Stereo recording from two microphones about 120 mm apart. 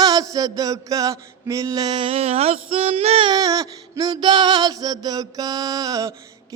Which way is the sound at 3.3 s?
30° right (ahead or behind).